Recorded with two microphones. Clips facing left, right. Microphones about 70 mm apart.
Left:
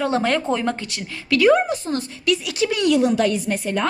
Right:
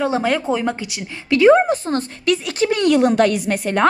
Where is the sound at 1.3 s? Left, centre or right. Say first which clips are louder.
Right 4 dB; right.